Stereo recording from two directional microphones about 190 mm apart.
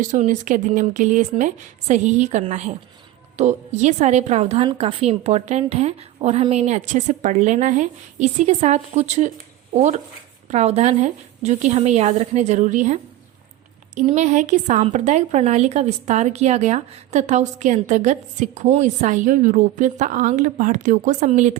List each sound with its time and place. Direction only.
0.1 s a woman's voice: 45° right (ahead or behind)